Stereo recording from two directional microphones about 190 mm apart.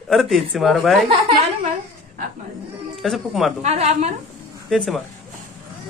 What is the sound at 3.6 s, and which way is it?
Speech, 35° right (ahead or behind).